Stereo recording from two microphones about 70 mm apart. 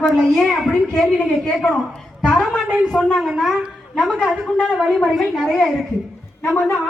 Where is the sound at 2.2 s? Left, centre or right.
Centre.